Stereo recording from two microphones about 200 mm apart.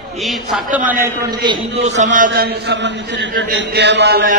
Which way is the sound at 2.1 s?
45° right (ahead or behind).